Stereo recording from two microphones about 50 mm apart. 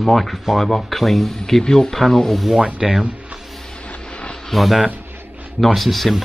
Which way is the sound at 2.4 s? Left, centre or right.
Centre.